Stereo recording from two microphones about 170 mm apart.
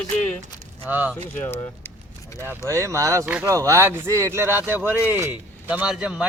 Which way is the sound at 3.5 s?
20° right (ahead or behind).